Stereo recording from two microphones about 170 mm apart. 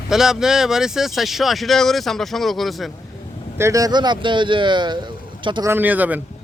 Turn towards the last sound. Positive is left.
turn(degrees=-10)  # may be behind; listen again after turning